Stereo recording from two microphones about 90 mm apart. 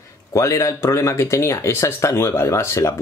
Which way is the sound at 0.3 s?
35° left (ahead or behind).